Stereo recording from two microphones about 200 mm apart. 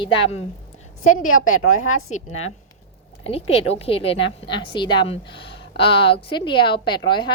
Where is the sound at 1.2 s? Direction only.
90° left.